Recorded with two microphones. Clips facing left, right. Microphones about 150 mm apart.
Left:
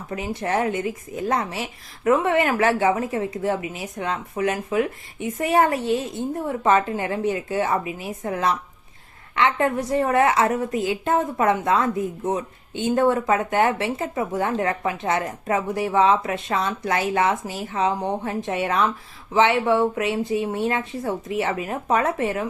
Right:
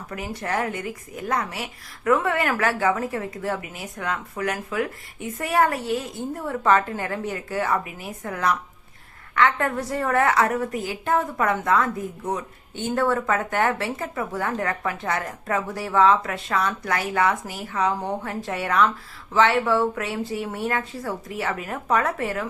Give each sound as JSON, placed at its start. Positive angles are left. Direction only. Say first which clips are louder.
{"t": 0.1, "sound": "a woman's voice", "louder": "left 4 dB", "side_deg": 25}